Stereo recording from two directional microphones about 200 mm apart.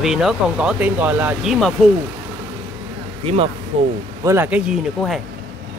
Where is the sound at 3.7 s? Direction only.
30° right (ahead or behind).